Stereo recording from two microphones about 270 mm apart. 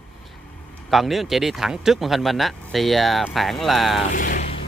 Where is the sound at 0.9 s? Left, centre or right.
Centre.